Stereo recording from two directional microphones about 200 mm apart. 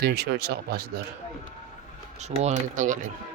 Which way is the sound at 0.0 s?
55° right (ahead or behind).